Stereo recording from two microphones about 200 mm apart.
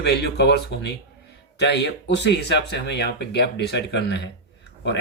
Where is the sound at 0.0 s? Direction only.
55° left (ahead or behind).